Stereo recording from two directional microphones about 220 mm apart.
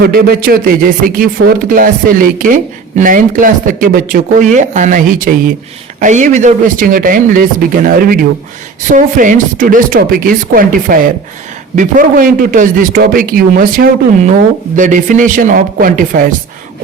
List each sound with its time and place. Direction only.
0.0 s speech: 45° right (ahead or behind)